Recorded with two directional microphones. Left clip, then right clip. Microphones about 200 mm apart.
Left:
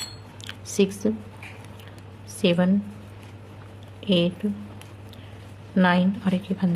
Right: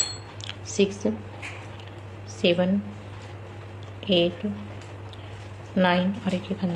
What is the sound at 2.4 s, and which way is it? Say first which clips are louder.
Speech: right 1 dB; 30° left (ahead or behind).